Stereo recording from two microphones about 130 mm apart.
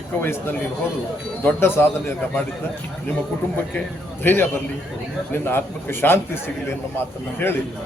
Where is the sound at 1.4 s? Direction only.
15° left (ahead or behind).